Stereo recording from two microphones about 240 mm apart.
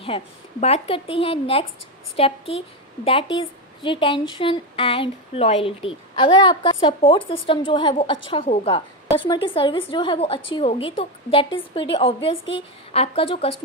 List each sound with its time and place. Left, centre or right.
0.1 s a woman's voice: left